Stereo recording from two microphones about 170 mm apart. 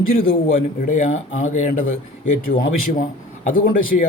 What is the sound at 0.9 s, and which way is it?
A man's voice, 45° left (ahead or behind).